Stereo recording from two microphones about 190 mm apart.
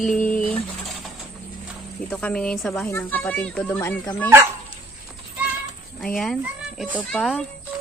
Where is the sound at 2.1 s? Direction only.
5° left (ahead or behind).